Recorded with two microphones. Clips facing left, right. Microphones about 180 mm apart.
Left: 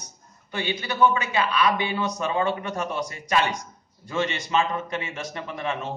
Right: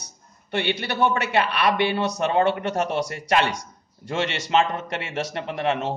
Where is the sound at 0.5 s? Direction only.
70° right (ahead or behind).